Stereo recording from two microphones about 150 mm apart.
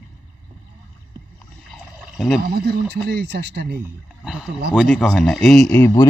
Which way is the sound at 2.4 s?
90° right.